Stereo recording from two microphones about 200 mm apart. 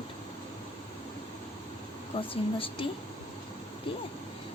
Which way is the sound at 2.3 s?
25° left (ahead or behind).